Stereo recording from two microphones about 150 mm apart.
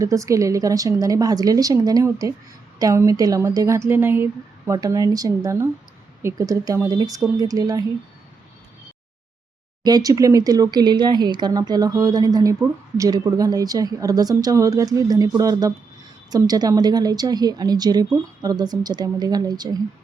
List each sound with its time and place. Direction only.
0.0 s a woman's voice: 20° right (ahead or behind)
9.8 s a woman's voice: 25° right (ahead or behind)